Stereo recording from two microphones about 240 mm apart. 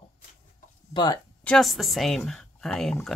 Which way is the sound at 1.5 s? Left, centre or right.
Centre.